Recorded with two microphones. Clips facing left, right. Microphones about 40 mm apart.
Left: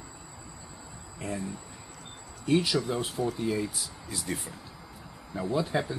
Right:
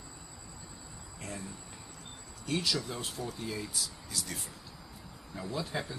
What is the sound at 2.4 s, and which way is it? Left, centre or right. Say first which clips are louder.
Speech: left 7 dB; centre.